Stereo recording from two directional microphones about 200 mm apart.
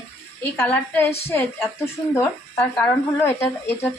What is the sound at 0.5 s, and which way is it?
Speech, 10° left (ahead or behind).